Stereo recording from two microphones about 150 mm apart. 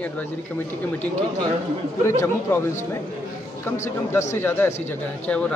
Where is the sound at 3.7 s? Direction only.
15° left (ahead or behind).